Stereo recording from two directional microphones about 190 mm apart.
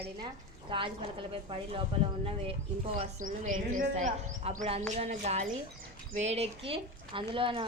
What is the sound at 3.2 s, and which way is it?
Speech, 45° right (ahead or behind).